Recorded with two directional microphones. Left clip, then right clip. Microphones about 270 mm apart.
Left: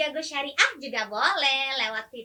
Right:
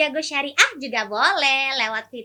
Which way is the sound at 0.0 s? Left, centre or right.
Right.